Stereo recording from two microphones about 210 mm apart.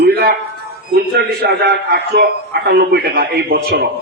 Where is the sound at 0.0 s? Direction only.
50° right (ahead or behind).